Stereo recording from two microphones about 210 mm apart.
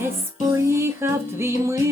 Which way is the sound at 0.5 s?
15° right (ahead or behind).